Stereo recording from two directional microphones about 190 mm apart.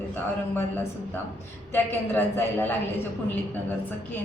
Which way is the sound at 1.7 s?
10° left (ahead or behind).